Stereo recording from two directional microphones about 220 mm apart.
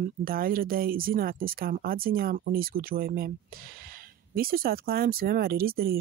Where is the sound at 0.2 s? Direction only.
40° right (ahead or behind).